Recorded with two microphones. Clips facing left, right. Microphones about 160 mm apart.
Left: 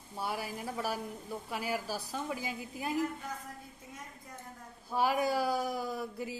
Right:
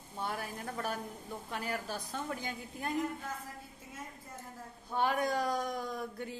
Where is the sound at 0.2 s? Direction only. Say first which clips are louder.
Left 2 dB; 10° left (ahead or behind).